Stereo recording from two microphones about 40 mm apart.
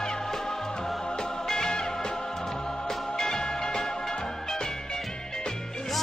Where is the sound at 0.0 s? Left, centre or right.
Centre.